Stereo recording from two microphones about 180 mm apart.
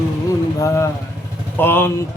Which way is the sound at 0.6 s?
15° left (ahead or behind).